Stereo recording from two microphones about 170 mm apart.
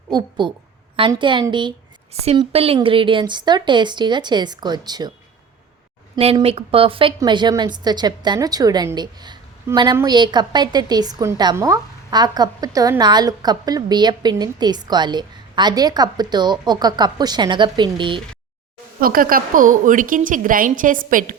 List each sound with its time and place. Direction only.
0.1 s a woman's voice: 25° right (ahead or behind)
6.1 s a woman's voice: 35° right (ahead or behind)
18.9 s a woman's voice: 55° right (ahead or behind)